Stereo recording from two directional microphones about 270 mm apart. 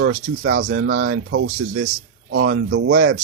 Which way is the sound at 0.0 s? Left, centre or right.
Right.